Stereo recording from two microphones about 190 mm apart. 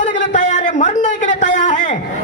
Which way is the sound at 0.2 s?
40° left (ahead or behind).